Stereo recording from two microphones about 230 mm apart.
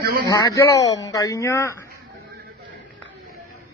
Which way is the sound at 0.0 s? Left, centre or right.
Right.